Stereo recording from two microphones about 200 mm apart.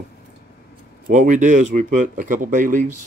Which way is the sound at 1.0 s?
40° right (ahead or behind).